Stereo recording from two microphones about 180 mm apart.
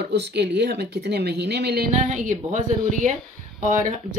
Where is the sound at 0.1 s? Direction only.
70° right (ahead or behind).